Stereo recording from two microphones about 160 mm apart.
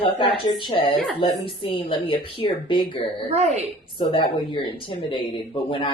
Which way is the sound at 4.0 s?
30° left (ahead or behind).